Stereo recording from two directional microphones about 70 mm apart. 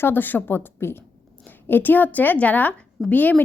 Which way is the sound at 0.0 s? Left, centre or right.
Left.